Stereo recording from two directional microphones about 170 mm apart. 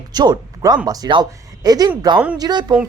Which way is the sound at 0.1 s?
25° right (ahead or behind).